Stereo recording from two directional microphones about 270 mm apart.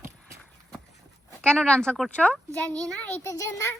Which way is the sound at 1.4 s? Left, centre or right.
Centre.